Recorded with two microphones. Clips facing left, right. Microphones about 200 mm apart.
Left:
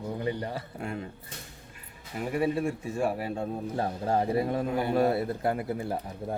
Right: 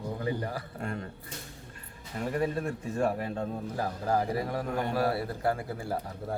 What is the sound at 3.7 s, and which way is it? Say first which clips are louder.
Speech: left 2 dB; 25° left (ahead or behind).